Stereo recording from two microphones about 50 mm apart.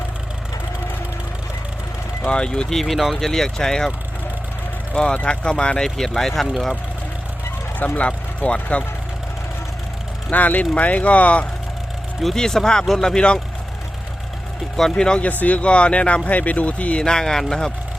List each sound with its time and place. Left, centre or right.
2.2 s speech: centre
2.8 s speech: centre
4.9 s speech: left
6.0 s speech: centre
7.9 s speech: left
10.2 s speech: left
12.2 s speech: centre
14.9 s speech: centre
15.2 s speech: left
17.0 s speech: centre